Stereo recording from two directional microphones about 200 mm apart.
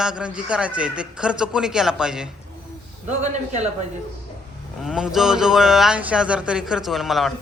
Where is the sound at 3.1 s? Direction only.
35° right (ahead or behind).